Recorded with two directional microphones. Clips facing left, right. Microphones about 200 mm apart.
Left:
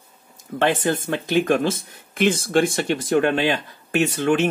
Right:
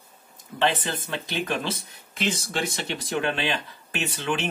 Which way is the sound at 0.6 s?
50° left (ahead or behind).